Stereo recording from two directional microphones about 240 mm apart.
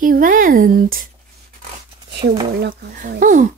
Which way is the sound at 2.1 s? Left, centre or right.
Right.